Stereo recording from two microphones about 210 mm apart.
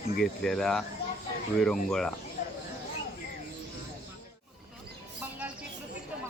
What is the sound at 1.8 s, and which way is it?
Speech, centre (ahead or behind).